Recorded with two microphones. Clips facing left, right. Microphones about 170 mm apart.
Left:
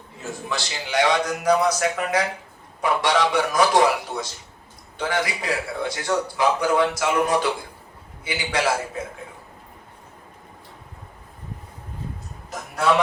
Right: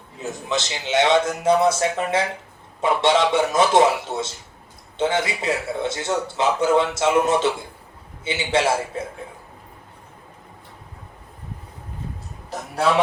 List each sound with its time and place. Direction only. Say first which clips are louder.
0.2 s a man's voice: right 4 dB; 20° right (ahead or behind)